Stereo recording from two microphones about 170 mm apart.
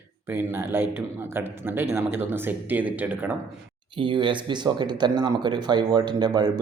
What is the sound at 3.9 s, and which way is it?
Speech, 30° right (ahead or behind).